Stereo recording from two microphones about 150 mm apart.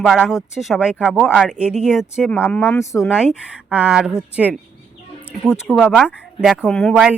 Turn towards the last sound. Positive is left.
turn(degrees=0)  # may be behind; listen again after turning